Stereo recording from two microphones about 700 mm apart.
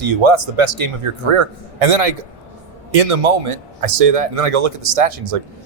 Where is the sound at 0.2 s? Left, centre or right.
Right.